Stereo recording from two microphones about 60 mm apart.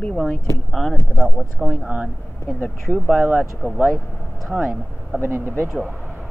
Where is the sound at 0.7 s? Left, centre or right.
Centre.